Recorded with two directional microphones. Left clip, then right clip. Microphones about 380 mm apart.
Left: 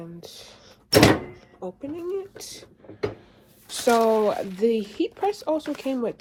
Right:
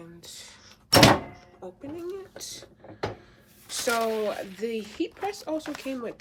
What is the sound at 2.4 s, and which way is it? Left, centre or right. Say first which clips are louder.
Speech: even; centre.